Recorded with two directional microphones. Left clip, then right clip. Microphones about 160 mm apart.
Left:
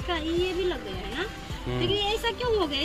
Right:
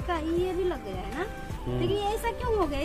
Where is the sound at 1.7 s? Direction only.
5° right (ahead or behind).